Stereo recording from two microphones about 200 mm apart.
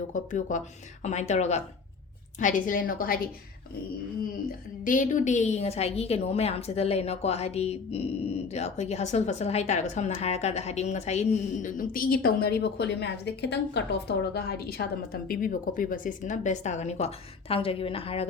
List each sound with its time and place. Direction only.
0.1 s a woman's voice: 40° left (ahead or behind)
4.4 s a woman's voice: 45° left (ahead or behind)